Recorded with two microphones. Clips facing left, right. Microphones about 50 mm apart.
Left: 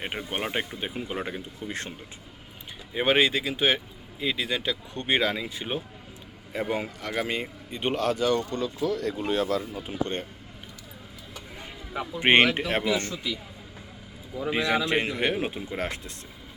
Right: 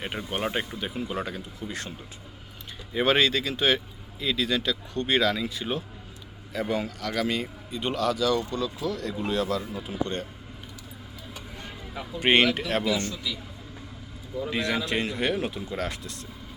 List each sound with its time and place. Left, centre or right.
0.0 s speech: centre
0.4 s speech: centre
0.9 s speech: left
2.9 s speech: centre; by 10.2 s left
11.9 s speech: left
14.5 s speech: left